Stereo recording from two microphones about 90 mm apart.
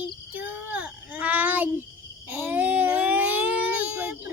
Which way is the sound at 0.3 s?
15° right (ahead or behind).